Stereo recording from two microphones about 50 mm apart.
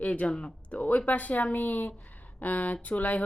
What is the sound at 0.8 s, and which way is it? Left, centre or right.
A woman's voice, left.